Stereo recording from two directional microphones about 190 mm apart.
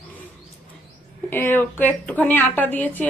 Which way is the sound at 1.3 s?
10° left (ahead or behind).